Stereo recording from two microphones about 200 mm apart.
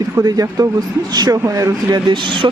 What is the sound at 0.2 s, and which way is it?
Speech, 15° right (ahead or behind).